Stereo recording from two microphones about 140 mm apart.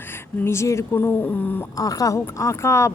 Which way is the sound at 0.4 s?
20° left (ahead or behind).